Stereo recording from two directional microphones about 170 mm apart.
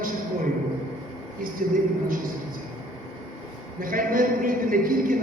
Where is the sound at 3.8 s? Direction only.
55° right (ahead or behind).